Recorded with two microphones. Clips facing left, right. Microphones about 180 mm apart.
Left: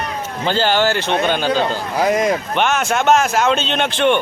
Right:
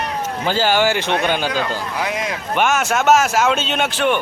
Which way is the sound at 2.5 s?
5° right (ahead or behind).